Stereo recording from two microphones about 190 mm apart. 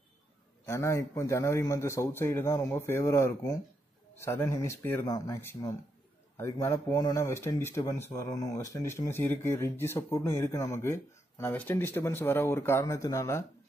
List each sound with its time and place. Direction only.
0.7 s speech: 15° left (ahead or behind)